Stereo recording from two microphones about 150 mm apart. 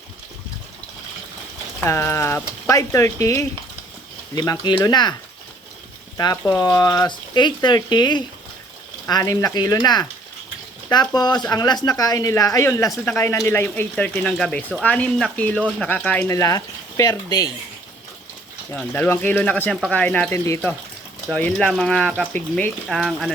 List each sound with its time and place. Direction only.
1.8 s speech: 15° left (ahead or behind)
6.3 s speech: 15° left (ahead or behind)
18.8 s speech: 10° left (ahead or behind)